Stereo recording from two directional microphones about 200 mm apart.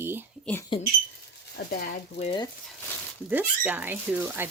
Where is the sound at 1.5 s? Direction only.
50° left (ahead or behind).